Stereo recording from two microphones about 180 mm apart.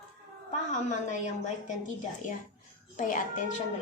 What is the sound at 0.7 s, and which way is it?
A woman's voice, 40° left (ahead or behind).